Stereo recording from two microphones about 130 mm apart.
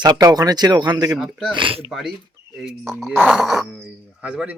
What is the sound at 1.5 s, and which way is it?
Speech, 45° right (ahead or behind).